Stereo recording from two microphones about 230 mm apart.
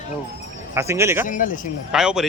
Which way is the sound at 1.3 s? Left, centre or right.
Left.